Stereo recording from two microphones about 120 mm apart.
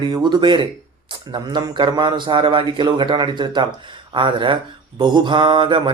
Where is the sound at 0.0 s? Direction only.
35° right (ahead or behind).